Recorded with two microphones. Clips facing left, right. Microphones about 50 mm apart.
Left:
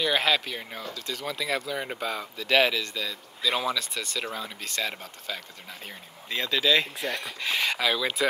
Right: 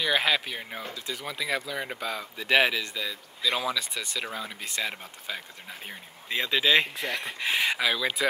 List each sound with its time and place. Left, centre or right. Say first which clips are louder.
0.0 s speech: left 1 dB; centre
2.3 s speech: even; right
3.4 s speech: left 1 dB; centre
7.8 s speech: left 1 dB; centre